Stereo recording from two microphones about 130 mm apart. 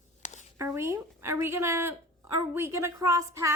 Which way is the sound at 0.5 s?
25° right (ahead or behind).